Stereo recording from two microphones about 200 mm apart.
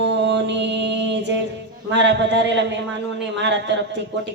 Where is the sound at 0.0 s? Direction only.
60° right (ahead or behind).